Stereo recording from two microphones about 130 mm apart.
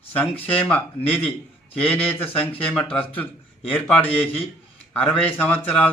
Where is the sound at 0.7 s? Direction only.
10° left (ahead or behind).